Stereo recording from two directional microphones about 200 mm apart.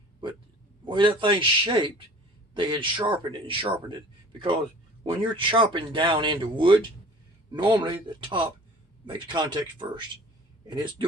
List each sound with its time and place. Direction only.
0.2 s a sound: 25° right (ahead or behind)
0.9 s speech: 25° right (ahead or behind)
5.4 s speech: 25° right (ahead or behind)